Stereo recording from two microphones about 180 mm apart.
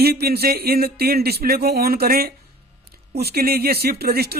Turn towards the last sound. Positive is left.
turn(degrees=-60)  # may be behind; listen again after turning